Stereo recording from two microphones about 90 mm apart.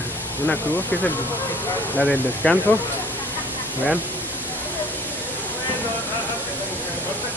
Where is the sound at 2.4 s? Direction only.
20° left (ahead or behind).